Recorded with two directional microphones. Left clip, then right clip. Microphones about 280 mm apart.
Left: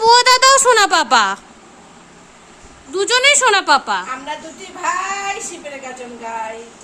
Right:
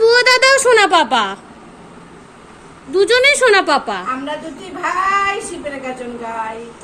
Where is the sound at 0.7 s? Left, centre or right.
Left.